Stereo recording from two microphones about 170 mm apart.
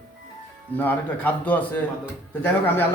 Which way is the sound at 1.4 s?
10° left (ahead or behind).